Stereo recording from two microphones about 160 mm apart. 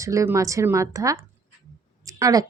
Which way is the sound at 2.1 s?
20° right (ahead or behind).